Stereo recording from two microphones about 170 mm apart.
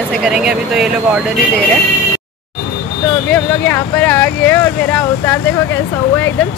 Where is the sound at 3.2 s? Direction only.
10° left (ahead or behind).